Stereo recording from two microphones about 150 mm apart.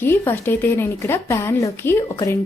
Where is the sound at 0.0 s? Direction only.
15° left (ahead or behind).